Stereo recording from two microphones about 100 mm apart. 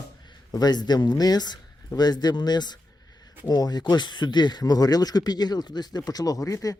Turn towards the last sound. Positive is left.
turn(degrees=35)  # may be behind; listen again after turning